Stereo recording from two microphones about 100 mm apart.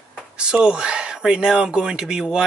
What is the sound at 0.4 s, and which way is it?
Speech, 10° right (ahead or behind).